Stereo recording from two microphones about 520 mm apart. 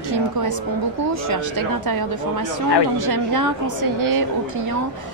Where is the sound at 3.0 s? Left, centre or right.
Right.